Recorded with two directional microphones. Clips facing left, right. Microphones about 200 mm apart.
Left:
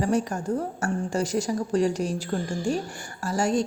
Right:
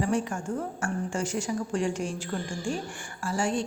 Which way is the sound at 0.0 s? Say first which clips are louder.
Left 3 dB; 40° left (ahead or behind).